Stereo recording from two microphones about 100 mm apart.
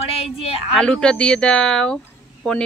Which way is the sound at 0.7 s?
10° left (ahead or behind).